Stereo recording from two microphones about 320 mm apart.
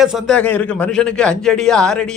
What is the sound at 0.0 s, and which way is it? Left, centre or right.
Speech, centre.